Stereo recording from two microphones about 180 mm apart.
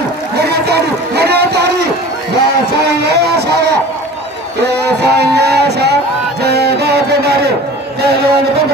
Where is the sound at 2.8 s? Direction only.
65° right (ahead or behind).